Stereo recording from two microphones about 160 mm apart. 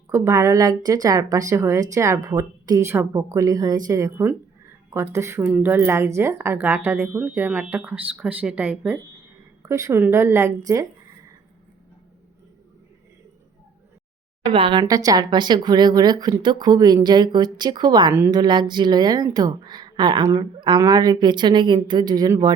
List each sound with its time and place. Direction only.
0.1 s a woman's voice: 20° right (ahead or behind)
14.4 s a woman's voice: 35° right (ahead or behind)